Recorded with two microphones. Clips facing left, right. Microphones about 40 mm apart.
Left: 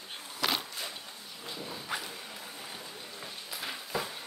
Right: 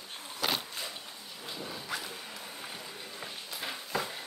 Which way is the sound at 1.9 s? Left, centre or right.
Centre.